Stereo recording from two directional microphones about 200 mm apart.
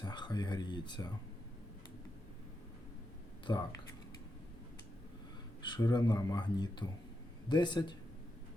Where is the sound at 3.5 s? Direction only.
20° left (ahead or behind).